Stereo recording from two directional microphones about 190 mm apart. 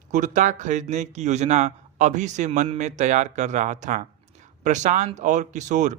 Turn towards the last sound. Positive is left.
turn(degrees=-40)  # may be behind; listen again after turning